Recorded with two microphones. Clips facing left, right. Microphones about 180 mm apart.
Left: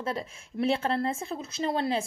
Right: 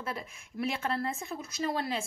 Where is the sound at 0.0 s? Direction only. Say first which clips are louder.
Left 5 dB; 30° left (ahead or behind).